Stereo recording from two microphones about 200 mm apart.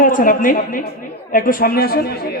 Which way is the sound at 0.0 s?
40° left (ahead or behind).